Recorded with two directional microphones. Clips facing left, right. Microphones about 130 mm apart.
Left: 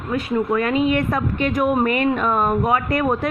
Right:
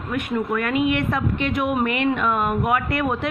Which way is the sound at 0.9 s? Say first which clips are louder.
Left 2 dB; 45° left (ahead or behind).